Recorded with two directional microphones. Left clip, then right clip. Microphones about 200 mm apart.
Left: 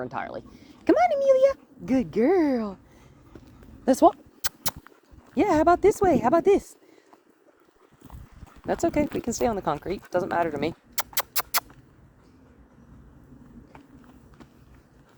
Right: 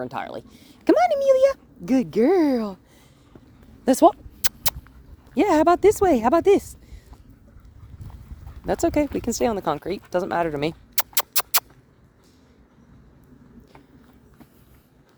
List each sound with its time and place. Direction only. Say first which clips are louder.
0.0 s speech: right 2 dB; 50° right (ahead or behind)
3.8 s a sound: right 3 dB; 50° right (ahead or behind)
5.3 s speech: right 2 dB; 50° right (ahead or behind)
8.6 s speech: right 3 dB; 50° right (ahead or behind)